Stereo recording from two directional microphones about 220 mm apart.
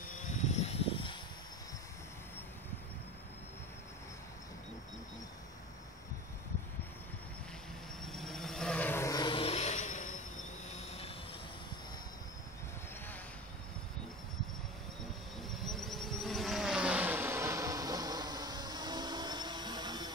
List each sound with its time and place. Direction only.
0.0 s a sound: 35° left (ahead or behind)
8.0 s vehicle: centre (ahead or behind); by 10.1 s 35° left (ahead or behind)
10.7 s train: 30° left (ahead or behind)
15.5 s vehicle: centre (ahead or behind); by 20.1 s 20° right (ahead or behind)